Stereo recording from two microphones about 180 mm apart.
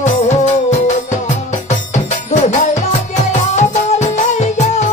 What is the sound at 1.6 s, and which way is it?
Music, 40° left (ahead or behind).